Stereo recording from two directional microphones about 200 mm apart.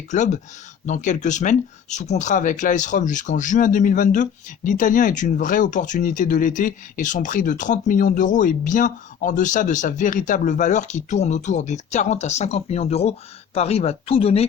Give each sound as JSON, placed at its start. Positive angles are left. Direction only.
{"t": 0.1, "sound": "speech", "side_deg": 35}